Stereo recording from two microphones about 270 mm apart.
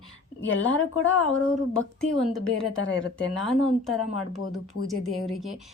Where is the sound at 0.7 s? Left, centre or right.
Centre.